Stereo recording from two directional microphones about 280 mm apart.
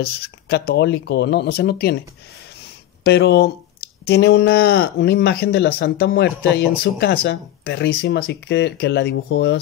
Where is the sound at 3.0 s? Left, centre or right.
Left.